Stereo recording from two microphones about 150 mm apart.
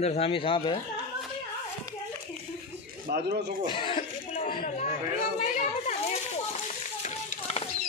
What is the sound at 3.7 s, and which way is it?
Speech, 35° left (ahead or behind).